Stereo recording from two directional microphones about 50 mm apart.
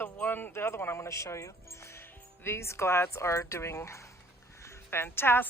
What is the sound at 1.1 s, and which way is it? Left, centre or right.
Speech, left.